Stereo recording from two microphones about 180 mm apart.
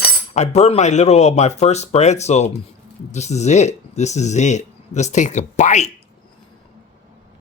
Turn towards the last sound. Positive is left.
turn(degrees=40)  # may be behind; listen again after turning